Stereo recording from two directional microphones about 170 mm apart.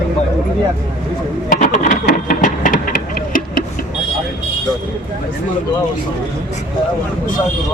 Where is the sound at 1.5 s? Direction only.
50° left (ahead or behind).